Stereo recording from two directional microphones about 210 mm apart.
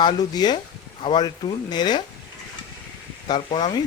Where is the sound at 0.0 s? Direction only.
20° left (ahead or behind).